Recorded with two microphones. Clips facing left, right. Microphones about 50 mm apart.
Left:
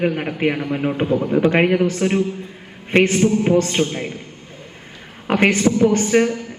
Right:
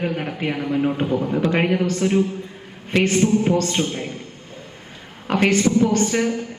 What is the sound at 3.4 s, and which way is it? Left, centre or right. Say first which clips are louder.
Speech: left 3 dB; left.